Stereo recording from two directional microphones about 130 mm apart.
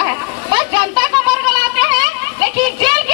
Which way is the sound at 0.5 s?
35° right (ahead or behind).